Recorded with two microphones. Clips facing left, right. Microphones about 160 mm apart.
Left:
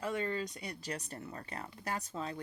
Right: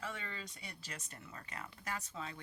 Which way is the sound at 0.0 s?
40° left (ahead or behind).